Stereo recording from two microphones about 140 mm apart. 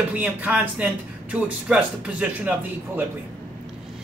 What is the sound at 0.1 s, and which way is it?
A woman's voice, 10° right (ahead or behind).